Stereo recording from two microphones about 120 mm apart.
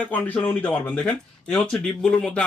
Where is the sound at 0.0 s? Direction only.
15° left (ahead or behind).